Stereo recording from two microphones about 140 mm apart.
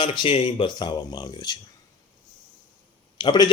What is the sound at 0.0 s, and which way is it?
Speech, 35° left (ahead or behind).